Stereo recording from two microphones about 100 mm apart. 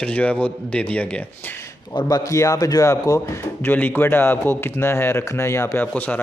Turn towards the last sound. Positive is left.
turn(degrees=15)  # may be behind; listen again after turning